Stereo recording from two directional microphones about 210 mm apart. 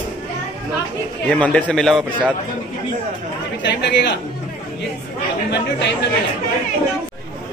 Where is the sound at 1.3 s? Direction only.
5° left (ahead or behind).